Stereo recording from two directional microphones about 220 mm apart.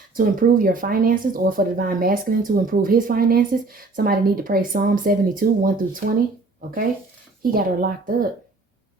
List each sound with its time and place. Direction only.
0.1 s speech: 40° right (ahead or behind)